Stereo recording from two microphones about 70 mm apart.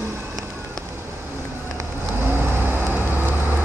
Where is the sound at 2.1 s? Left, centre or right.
Right.